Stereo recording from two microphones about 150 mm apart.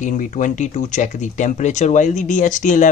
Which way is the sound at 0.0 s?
55° left (ahead or behind).